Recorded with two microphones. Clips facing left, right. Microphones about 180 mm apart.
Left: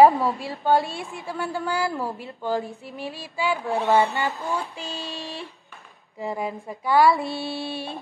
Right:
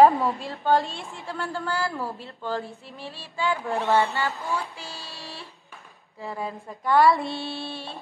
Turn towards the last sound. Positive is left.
turn(degrees=10)  # may be behind; listen again after turning